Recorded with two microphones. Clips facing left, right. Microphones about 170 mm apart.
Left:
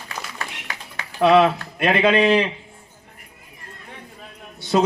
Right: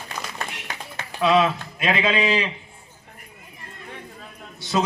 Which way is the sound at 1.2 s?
60° left (ahead or behind).